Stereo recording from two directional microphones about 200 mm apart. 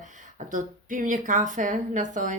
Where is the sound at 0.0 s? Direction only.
40° right (ahead or behind).